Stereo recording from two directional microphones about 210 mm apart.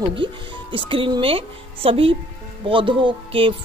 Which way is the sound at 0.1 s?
25° right (ahead or behind).